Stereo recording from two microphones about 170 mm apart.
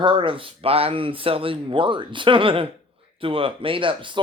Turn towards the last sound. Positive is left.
turn(degrees=-30)  # may be behind; listen again after turning